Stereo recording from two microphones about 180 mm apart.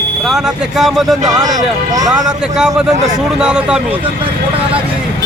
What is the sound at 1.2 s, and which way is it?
Speech, 20° right (ahead or behind).